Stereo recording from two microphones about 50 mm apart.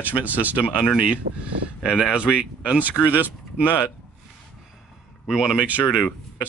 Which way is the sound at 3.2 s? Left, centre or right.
Right.